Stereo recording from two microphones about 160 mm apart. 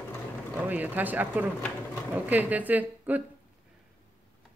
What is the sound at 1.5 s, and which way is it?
Sewing machine, 15° left (ahead or behind).